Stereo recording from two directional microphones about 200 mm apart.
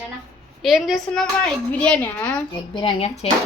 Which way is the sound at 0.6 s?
Centre (ahead or behind).